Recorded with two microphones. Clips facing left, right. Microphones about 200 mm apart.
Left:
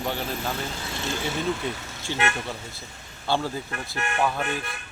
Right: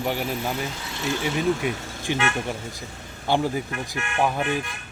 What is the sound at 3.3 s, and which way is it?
Speech, 15° right (ahead or behind).